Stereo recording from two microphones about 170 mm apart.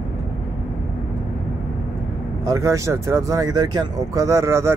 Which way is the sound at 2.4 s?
20° right (ahead or behind).